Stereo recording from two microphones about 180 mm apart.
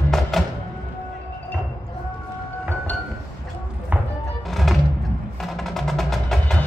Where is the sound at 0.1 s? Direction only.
Centre (ahead or behind).